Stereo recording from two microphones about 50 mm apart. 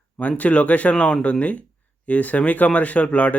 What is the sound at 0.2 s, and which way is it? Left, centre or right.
A man's voice, left.